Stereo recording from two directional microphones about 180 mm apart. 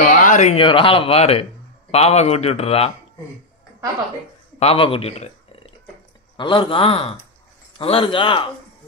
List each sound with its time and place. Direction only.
0.0 s speech: 45° left (ahead or behind)
4.6 s a man's voice: 30° left (ahead or behind)